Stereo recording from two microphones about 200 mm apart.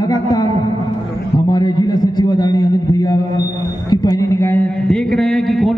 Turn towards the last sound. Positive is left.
turn(degrees=0)  # may be behind; listen again after turning